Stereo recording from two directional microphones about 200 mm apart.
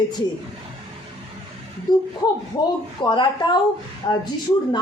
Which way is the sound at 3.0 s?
20° left (ahead or behind).